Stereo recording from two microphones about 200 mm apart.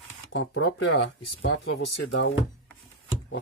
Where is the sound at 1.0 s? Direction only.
60° left (ahead or behind).